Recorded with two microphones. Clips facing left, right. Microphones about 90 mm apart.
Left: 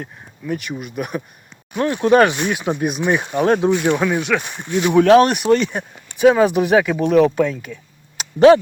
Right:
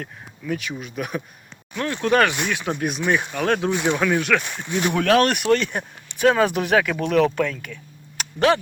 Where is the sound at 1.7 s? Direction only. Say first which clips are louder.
Left 6 dB; 20° left (ahead or behind).